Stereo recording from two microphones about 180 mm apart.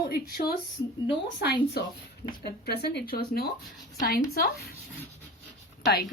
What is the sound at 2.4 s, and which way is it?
A woman's voice, 65° left (ahead or behind).